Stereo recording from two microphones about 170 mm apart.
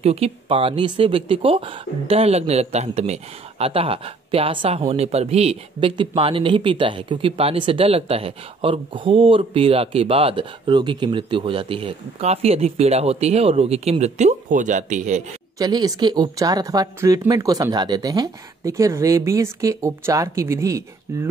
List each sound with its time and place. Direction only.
0.0 s speech: 35° right (ahead or behind)
15.6 s speech: 25° right (ahead or behind)